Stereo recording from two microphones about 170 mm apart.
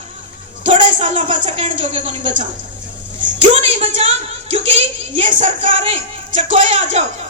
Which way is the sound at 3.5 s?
35° right (ahead or behind).